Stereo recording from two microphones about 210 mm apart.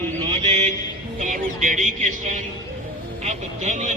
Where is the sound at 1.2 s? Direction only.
35° right (ahead or behind).